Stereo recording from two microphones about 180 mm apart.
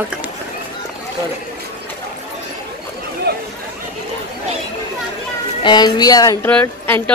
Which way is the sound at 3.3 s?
60° right (ahead or behind).